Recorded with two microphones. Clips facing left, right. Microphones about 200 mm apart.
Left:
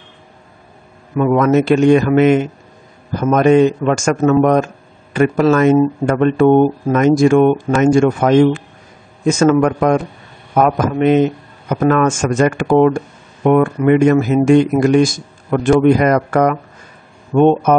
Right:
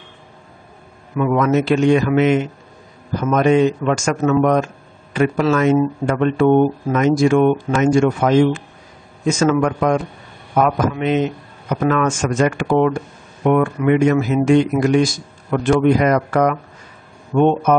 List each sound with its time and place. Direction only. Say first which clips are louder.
1.1 s a man's voice: left 4 dB; 45° left (ahead or behind)